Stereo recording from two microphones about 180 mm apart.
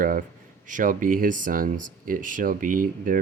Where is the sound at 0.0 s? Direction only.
50° right (ahead or behind).